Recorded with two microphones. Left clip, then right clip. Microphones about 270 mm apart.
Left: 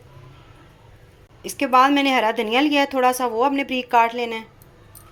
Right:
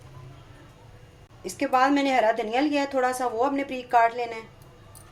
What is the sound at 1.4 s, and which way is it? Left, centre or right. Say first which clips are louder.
A woman's voice: left 6 dB; left.